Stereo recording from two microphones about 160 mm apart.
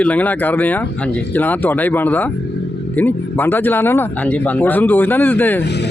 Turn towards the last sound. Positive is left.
turn(degrees=90)